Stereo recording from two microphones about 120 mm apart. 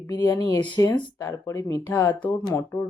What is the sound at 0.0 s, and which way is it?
Speech, 25° left (ahead or behind).